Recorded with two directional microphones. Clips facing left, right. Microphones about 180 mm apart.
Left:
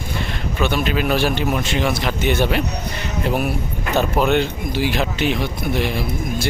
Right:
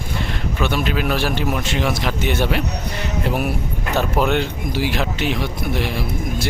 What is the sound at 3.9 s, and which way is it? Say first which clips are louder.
Speech: left 2 dB; centre (ahead or behind).